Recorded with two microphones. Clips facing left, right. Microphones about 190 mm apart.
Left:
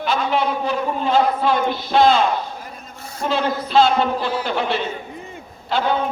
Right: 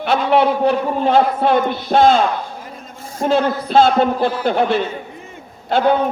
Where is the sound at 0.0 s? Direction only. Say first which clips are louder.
Right 5 dB; 65° right (ahead or behind).